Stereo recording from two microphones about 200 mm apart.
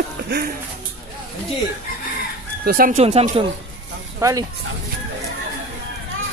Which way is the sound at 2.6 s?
45° right (ahead or behind).